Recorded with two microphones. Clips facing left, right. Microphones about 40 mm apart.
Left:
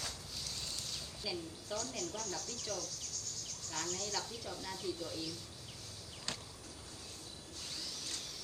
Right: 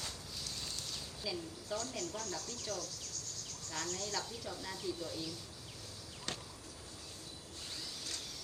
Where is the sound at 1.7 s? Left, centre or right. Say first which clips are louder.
Right 1 dB; right.